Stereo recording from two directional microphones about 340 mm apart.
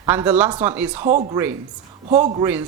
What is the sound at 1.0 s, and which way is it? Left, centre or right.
A man's voice, right.